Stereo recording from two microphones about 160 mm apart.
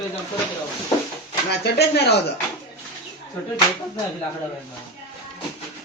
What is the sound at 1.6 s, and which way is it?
Speech, 90° left.